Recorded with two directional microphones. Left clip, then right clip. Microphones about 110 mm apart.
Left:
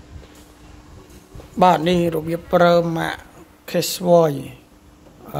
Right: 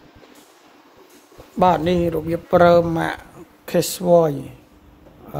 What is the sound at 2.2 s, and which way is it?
Speech, 30° right (ahead or behind).